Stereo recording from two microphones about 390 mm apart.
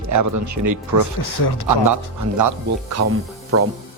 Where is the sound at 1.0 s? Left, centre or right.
Left.